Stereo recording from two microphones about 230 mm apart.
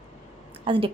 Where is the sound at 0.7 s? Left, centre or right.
Right.